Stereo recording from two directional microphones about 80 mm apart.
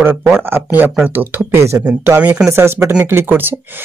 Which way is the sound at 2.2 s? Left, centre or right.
Centre.